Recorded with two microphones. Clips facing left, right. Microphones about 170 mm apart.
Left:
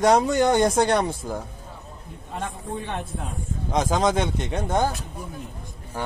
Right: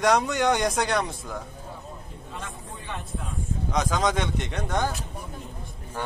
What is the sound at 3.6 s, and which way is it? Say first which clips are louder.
Speech: left 4 dB; 30° left (ahead or behind).